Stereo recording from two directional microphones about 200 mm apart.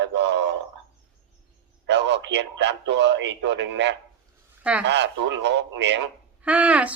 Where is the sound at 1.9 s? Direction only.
60° right (ahead or behind).